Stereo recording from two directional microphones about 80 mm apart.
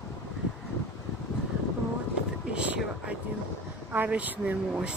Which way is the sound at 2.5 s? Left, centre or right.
Centre.